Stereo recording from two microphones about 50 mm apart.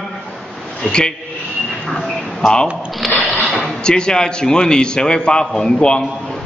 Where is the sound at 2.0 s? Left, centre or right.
Centre.